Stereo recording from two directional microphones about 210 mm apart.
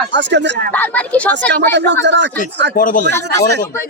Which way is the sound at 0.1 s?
55° right (ahead or behind).